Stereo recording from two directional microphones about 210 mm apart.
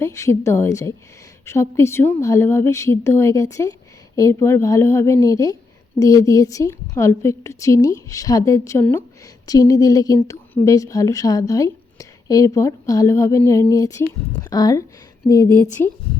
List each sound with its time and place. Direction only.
0.0 s a woman's voice: 15° left (ahead or behind)